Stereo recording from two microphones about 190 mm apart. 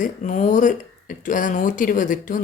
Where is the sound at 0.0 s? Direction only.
40° left (ahead or behind).